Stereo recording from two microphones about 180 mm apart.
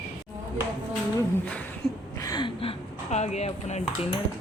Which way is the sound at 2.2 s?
25° left (ahead or behind).